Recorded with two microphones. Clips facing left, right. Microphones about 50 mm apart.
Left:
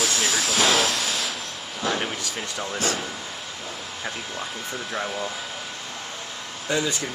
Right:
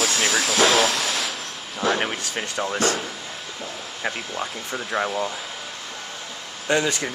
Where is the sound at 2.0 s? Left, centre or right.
Right.